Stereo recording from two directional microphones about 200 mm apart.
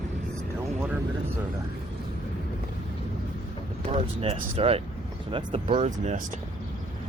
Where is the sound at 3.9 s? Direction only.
30° right (ahead or behind).